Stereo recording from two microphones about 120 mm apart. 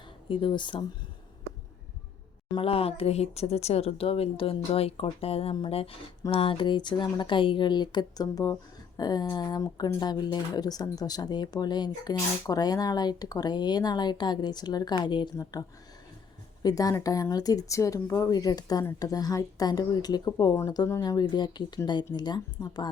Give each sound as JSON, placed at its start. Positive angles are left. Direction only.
{"t": 0.3, "sound": "speech", "side_deg": 45}
{"t": 2.6, "sound": "speech", "side_deg": 55}
{"t": 16.6, "sound": "speech", "side_deg": 30}